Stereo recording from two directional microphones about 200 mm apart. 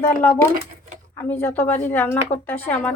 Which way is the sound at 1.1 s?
10° left (ahead or behind).